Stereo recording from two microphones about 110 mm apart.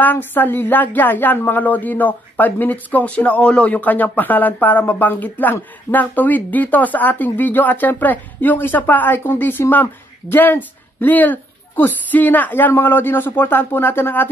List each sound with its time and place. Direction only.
0.0 s speech: 15° left (ahead or behind)